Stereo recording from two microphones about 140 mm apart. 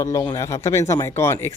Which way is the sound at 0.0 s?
25° left (ahead or behind).